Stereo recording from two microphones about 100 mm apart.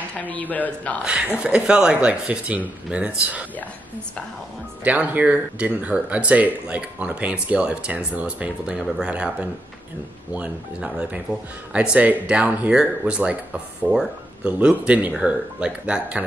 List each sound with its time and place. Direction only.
0.2 s speech: 15° left (ahead or behind)
1.4 s speech: 10° right (ahead or behind)
4.8 s speech: 15° right (ahead or behind)